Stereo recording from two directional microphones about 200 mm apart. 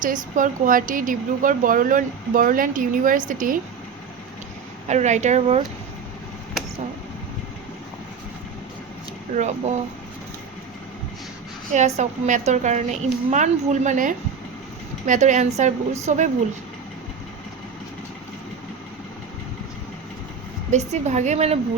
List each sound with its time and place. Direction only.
0.0 s a woman's voice: 40° right (ahead or behind)
4.9 s a woman's voice: 35° right (ahead or behind)
9.3 s a woman's voice: 35° right (ahead or behind)
11.9 s a woman's voice: 35° right (ahead or behind)
20.7 s a woman's voice: 35° right (ahead or behind)